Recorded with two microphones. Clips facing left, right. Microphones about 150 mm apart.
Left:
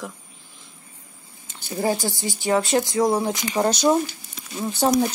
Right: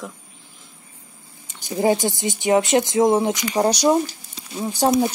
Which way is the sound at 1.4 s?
15° right (ahead or behind).